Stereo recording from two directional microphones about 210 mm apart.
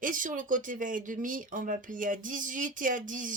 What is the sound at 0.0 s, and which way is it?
Speech, 40° right (ahead or behind).